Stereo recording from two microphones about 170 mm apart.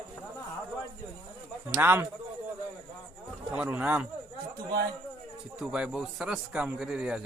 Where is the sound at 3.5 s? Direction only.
10° right (ahead or behind).